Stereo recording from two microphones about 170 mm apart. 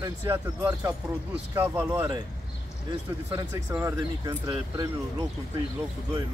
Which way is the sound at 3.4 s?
15° right (ahead or behind).